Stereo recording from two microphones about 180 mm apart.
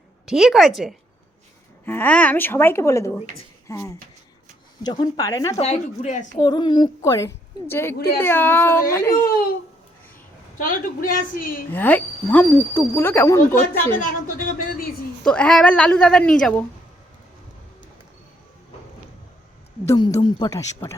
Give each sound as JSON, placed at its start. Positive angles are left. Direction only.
{"t": 0.3, "sound": "a woman's voice", "side_deg": 0}
{"t": 1.8, "sound": "a woman's voice", "side_deg": 10}
{"t": 5.5, "sound": "speech", "side_deg": 40}
{"t": 6.4, "sound": "a woman's voice", "side_deg": 25}
{"t": 10.6, "sound": "a woman's voice", "side_deg": 50}
{"t": 11.7, "sound": "speech", "side_deg": 10}
{"t": 14.3, "sound": "a woman's voice", "side_deg": 50}
{"t": 15.2, "sound": "a woman's voice", "side_deg": 5}
{"t": 19.8, "sound": "speech", "side_deg": 15}